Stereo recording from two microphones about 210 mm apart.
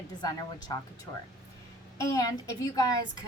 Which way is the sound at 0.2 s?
20° left (ahead or behind).